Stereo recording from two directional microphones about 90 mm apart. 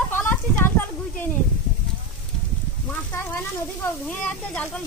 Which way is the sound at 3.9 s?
15° left (ahead or behind).